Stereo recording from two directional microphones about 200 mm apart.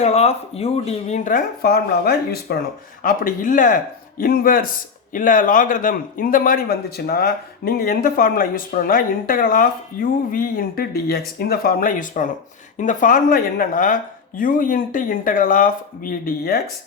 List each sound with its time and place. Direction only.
0.0 s a man's voice: 30° left (ahead or behind)